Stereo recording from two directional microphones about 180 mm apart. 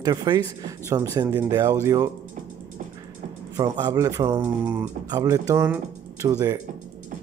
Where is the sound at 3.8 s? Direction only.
20° right (ahead or behind).